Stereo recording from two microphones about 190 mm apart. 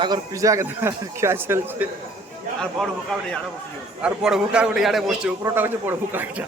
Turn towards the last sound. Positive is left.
turn(degrees=-10)  # may be behind; listen again after turning